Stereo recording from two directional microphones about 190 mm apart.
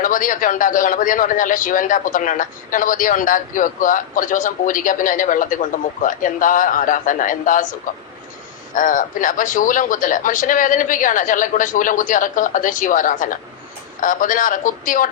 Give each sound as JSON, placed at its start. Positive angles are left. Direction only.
{"t": 0.0, "sound": "a man's voice", "side_deg": 45}
{"t": 8.7, "sound": "a man's voice", "side_deg": 45}